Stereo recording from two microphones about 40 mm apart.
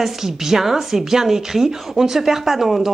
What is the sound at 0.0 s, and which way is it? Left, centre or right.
A woman's voice, centre.